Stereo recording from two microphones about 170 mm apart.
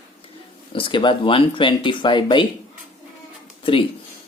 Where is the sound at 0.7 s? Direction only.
30° left (ahead or behind).